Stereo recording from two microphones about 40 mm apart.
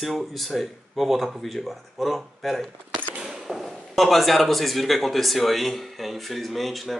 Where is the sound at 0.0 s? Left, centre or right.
Centre.